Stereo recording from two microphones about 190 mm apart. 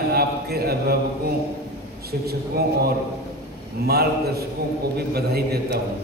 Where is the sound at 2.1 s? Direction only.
55° right (ahead or behind).